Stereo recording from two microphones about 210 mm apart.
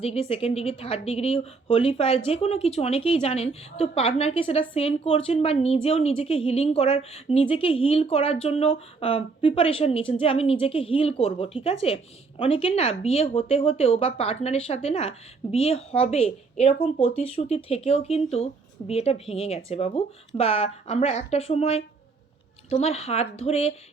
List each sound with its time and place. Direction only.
0.0 s a woman's voice: 30° left (ahead or behind)